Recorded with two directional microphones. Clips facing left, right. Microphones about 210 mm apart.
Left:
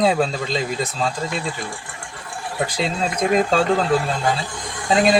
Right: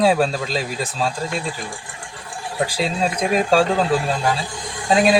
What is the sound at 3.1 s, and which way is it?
Speech, 15° right (ahead or behind).